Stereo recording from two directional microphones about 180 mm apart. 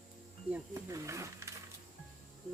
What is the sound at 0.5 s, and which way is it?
Speech, 15° right (ahead or behind).